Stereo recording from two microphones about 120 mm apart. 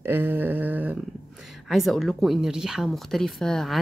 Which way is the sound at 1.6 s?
Centre (ahead or behind).